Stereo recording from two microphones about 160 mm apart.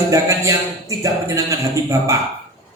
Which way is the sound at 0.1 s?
20° right (ahead or behind).